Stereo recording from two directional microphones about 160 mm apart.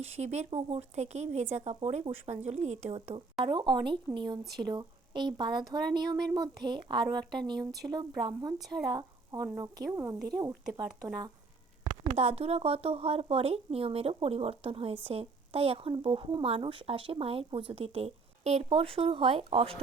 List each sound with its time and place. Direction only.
0.0 s speech: 45° right (ahead or behind)
3.4 s a woman's voice: 30° right (ahead or behind)
12.1 s a woman's voice: 40° right (ahead or behind)